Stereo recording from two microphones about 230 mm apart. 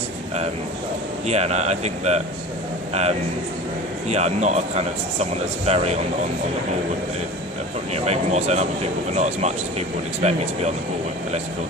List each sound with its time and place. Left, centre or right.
1.3 s speech: right
7.9 s speech: right